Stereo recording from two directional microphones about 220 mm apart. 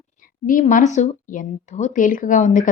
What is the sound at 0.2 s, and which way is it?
A woman's voice, 40° left (ahead or behind).